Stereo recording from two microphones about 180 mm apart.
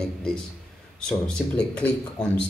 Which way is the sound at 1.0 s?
5° left (ahead or behind).